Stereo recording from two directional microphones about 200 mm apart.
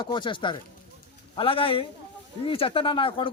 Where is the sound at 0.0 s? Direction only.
25° left (ahead or behind).